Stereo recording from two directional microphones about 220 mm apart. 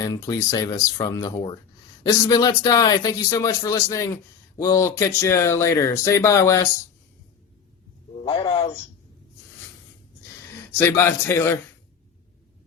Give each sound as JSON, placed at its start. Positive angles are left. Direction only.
{"t": 0.0, "sound": "speech", "side_deg": 15}
{"t": 8.2, "sound": "a man's voice", "side_deg": 20}
{"t": 10.3, "sound": "speech", "side_deg": 10}